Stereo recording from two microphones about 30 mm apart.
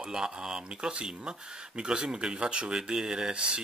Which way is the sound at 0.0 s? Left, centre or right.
Right.